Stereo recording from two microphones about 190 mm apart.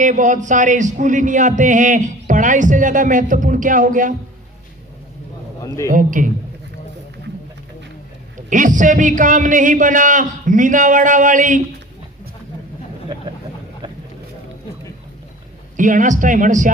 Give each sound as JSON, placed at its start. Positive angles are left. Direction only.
{"t": 0.0, "sound": "a man's voice", "side_deg": -40}
{"t": 5.9, "sound": "a man's voice", "side_deg": -45}
{"t": 8.4, "sound": "a man's voice", "side_deg": -40}
{"t": 15.8, "sound": "a man's voice", "side_deg": -40}